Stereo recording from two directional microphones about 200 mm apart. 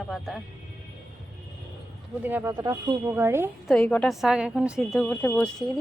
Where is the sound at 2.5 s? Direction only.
20° right (ahead or behind).